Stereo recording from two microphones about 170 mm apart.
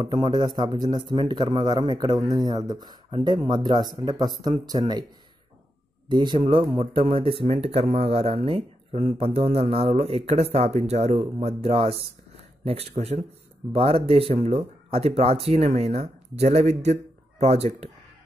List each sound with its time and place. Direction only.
0.0 s a man's voice: 25° right (ahead or behind)
6.0 s speech: 25° right (ahead or behind)